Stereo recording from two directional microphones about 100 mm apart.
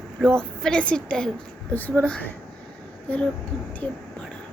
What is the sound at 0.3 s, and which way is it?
A woman's voice, 5° left (ahead or behind).